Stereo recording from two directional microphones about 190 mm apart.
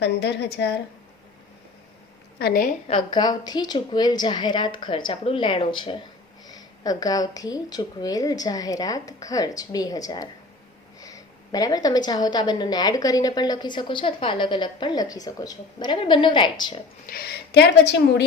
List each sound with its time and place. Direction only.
0.0 s a woman's voice: 60° left (ahead or behind)
2.4 s a woman's voice: 50° left (ahead or behind)
2.8 s a woman's voice: 25° left (ahead or behind)
17.1 s a woman's voice: 55° left (ahead or behind)